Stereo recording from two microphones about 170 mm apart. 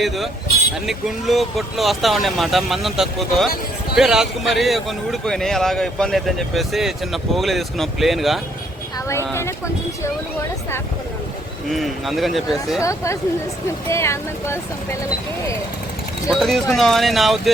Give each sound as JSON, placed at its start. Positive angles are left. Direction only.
{"t": 0.9, "sound": "speech", "side_deg": 0}
{"t": 9.0, "sound": "speech", "side_deg": 15}
{"t": 11.7, "sound": "speech", "side_deg": 0}
{"t": 12.8, "sound": "speech", "side_deg": 20}
{"t": 16.3, "sound": "speech", "side_deg": 0}